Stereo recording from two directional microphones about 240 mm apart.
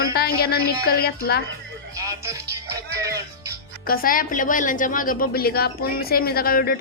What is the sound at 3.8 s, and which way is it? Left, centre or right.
A woman's voice, left.